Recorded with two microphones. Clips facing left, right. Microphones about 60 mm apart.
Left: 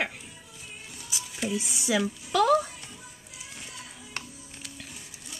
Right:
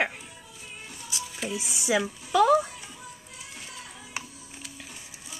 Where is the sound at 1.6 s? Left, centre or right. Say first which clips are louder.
Right 4 dB; centre.